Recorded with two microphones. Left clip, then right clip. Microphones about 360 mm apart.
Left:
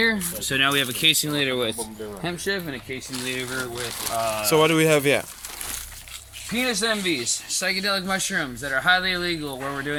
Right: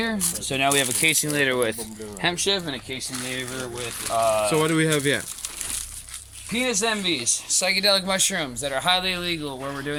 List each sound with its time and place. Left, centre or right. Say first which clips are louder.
0.0 s speech: left 5 dB; centre; by 2.7 s right
4.2 s speech: right 5 dB; centre
4.4 s speech: left 3 dB; centre
6.7 s speech: even; centre